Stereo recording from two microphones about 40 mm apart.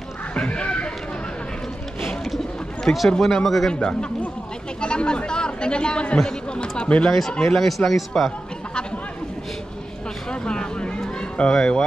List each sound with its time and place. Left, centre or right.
0.5 s a sound: left
2.2 s bird: centre
3.2 s speech: centre
3.4 s speech: centre
4.7 s speech: left
7.1 s speech: centre
10.3 s vehicle: left
11.5 s speech: centre